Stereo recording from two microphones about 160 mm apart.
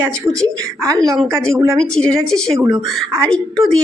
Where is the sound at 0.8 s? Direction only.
20° right (ahead or behind).